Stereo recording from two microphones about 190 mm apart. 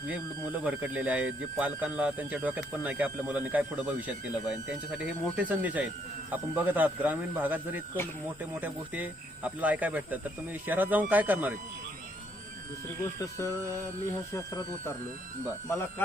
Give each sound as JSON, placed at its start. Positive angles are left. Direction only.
{"t": 0.6, "sound": "speech", "side_deg": -5}
{"t": 5.4, "sound": "speech", "side_deg": -10}
{"t": 13.0, "sound": "speech", "side_deg": 15}
{"t": 15.7, "sound": "speech", "side_deg": 15}